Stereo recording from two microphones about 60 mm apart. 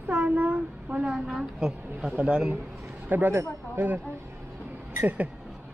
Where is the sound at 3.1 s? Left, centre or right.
Right.